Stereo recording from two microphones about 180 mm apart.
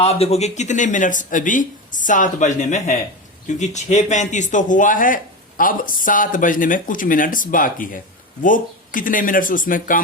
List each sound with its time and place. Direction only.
0.0 s speech: 35° left (ahead or behind)